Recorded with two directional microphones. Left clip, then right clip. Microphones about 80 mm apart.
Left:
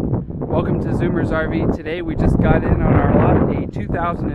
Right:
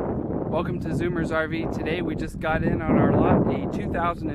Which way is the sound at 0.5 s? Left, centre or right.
Right.